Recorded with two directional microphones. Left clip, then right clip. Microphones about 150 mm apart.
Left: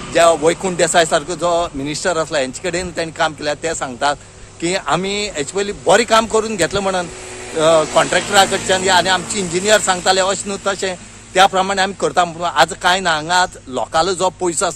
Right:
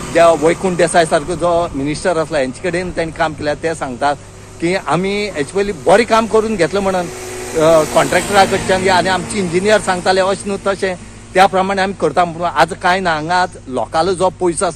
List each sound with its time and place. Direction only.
0.1 s speech: 15° left (ahead or behind)